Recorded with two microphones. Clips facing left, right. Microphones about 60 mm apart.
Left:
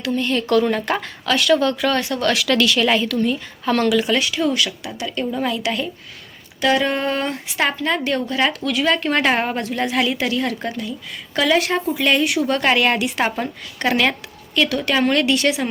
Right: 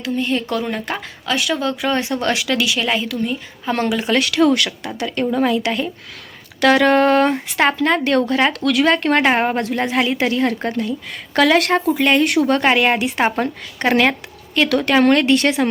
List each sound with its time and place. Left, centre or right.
0.0 s a woman's voice: centre
2.0 s a woman's voice: right
3.8 s a woman's voice: right
4.1 s speech: right
4.9 s a woman's voice: right
6.6 s a woman's voice: right
8.6 s speech: right
8.9 s a woman's voice: right
9.2 s a woman's voice: right
11.9 s a woman's voice: right
12.2 s speech: right
12.6 s a woman's voice: right
14.7 s a woman's voice: right